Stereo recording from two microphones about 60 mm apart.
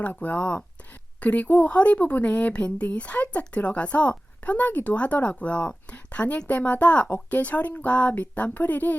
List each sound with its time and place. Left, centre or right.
0.0 s speech: left